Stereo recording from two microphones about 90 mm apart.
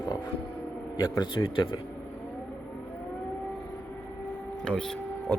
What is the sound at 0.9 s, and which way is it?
Speech, 50° left (ahead or behind).